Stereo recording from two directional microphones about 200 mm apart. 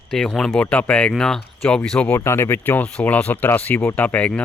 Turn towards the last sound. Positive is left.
turn(degrees=5)  # may be behind; listen again after turning